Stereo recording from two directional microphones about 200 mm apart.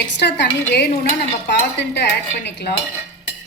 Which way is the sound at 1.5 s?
60° left (ahead or behind).